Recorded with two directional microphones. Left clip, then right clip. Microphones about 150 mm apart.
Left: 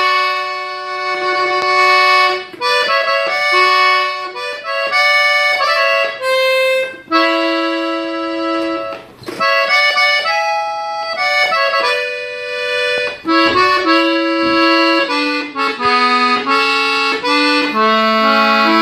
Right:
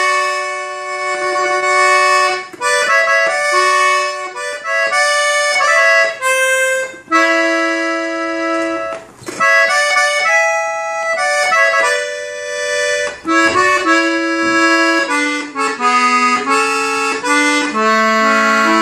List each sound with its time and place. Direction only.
0.0 s wind instrument: 15° right (ahead or behind)
1.2 s music: 15° right (ahead or behind)
4.8 s accordion: 15° right (ahead or behind)
7.1 s accordion: 15° right (ahead or behind)
9.4 s accordion: 15° right (ahead or behind)